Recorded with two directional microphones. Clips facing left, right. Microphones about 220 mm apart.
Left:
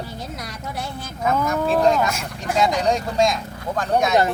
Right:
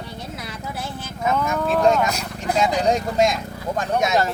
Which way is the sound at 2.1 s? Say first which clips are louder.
Right 1 dB; 35° right (ahead or behind).